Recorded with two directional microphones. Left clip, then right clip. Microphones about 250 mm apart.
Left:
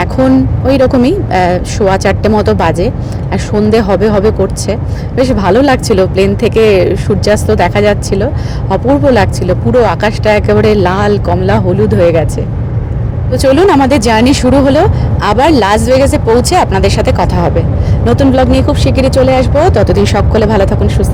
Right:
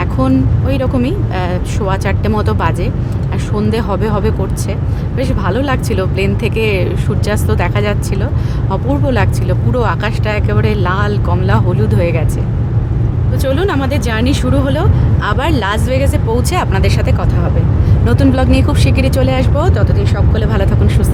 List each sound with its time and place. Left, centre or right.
0.7 s speech: left
13.3 s speech: left